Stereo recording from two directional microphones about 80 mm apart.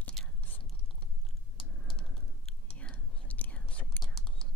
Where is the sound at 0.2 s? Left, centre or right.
Centre.